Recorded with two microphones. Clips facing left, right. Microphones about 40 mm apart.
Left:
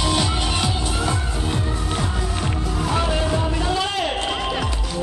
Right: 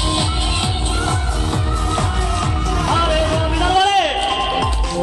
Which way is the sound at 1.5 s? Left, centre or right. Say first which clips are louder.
Right 5 dB; right.